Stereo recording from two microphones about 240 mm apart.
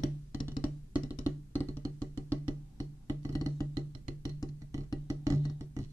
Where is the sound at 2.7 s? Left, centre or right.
Centre.